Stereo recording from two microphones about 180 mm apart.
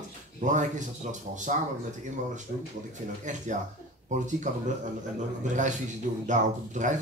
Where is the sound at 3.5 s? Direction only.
45° right (ahead or behind).